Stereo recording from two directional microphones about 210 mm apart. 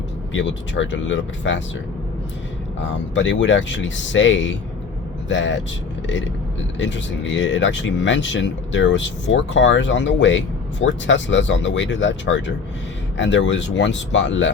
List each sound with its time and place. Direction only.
0.3 s speech: 60° left (ahead or behind)
2.8 s speech: 60° left (ahead or behind)
6.7 s speech: 60° left (ahead or behind)